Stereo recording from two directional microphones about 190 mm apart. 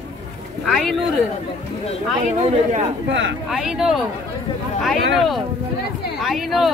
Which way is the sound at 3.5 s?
Centre (ahead or behind).